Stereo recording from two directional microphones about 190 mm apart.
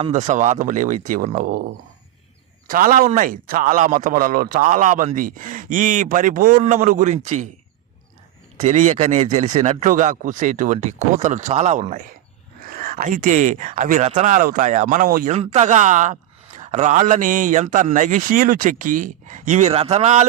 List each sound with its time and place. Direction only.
0.0 s a man's voice: 35° right (ahead or behind)
2.6 s a man's voice: 45° right (ahead or behind)
8.5 s a man's voice: 40° right (ahead or behind)
15.4 s a man's voice: 35° right (ahead or behind)